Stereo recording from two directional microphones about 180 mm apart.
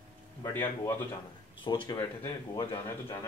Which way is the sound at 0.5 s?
10° left (ahead or behind).